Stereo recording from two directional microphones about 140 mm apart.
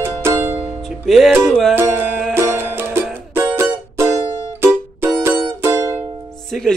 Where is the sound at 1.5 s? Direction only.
Centre (ahead or behind).